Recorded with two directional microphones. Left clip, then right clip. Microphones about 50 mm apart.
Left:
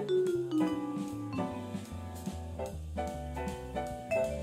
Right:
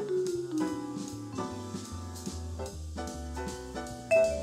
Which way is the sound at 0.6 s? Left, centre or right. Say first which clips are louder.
Left 1 dB; centre.